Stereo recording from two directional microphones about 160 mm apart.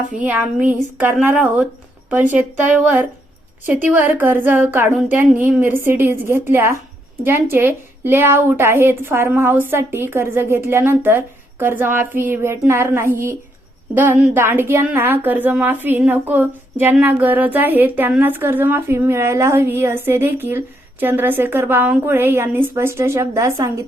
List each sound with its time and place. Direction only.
0.2 s a woman's voice: 10° right (ahead or behind)
3.7 s a woman's voice: 10° right (ahead or behind)